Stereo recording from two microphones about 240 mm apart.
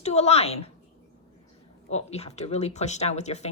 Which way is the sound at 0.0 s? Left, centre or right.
Left.